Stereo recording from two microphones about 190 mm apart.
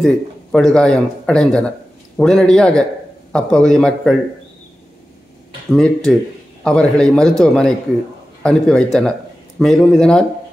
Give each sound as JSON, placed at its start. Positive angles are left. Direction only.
{"t": 0.0, "sound": "speech", "side_deg": 0}
{"t": 5.7, "sound": "speech", "side_deg": 5}